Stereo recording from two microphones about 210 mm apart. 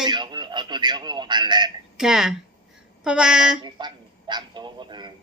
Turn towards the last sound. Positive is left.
turn(degrees=-20)  # may be behind; listen again after turning